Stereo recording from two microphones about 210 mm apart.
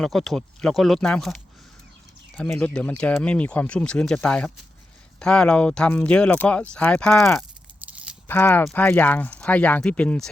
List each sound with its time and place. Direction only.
0.0 s speech: centre (ahead or behind)